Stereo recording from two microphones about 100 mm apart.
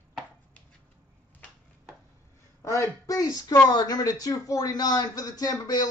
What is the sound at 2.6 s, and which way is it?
Speech, 30° left (ahead or behind).